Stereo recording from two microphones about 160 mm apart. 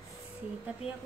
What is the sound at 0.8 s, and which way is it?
Speech, 40° left (ahead or behind).